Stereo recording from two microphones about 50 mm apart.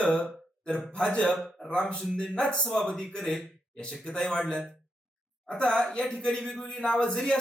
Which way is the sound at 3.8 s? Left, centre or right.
Centre.